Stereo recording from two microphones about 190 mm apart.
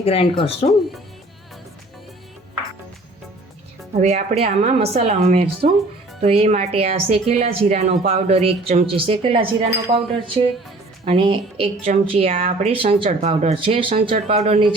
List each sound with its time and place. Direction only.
0.0 s speech: 30° left (ahead or behind)
4.0 s a woman's voice: 35° right (ahead or behind)